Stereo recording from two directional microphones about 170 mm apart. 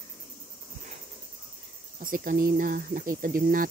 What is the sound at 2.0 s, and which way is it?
Speech, 55° right (ahead or behind).